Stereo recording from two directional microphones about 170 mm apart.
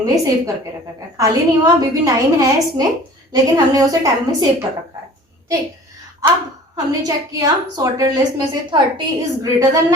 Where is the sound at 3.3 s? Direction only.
20° right (ahead or behind).